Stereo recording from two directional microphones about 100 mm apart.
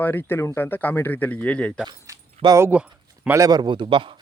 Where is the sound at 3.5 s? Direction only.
45° right (ahead or behind).